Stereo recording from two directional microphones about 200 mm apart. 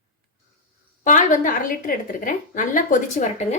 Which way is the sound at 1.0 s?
40° left (ahead or behind).